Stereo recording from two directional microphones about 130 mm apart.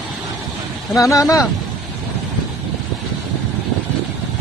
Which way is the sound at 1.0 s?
25° left (ahead or behind).